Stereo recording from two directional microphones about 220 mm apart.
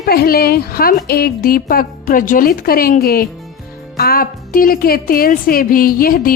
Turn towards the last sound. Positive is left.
turn(degrees=40)  # may be behind; listen again after turning